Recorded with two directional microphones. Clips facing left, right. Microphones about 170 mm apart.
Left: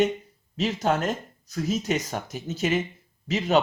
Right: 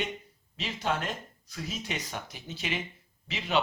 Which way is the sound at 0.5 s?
45° left (ahead or behind).